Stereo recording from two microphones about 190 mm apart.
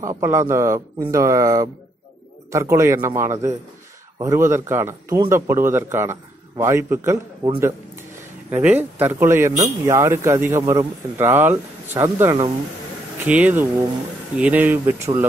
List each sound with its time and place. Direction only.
0.0 s a man's voice: 15° right (ahead or behind)
11.1 s a man's voice: 10° right (ahead or behind)